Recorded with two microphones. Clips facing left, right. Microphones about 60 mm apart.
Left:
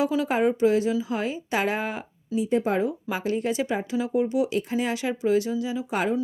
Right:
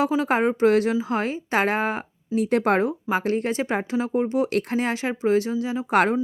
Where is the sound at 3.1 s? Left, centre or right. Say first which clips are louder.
Right 3 dB; right.